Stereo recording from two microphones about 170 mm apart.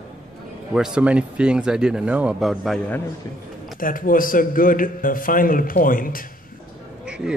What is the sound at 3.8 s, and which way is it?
A man's voice, 55° left (ahead or behind).